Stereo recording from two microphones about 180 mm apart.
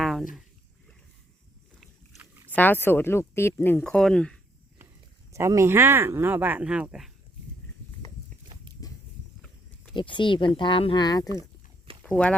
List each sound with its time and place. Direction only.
0.0 s a sound: centre (ahead or behind)
2.5 s speech: 10° left (ahead or behind)
5.3 s speech: 15° right (ahead or behind)
8.8 s walk: 20° left (ahead or behind)
9.9 s speech: 25° left (ahead or behind)
12.0 s speech: 5° left (ahead or behind)